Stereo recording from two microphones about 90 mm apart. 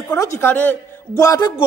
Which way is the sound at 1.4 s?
60° left (ahead or behind).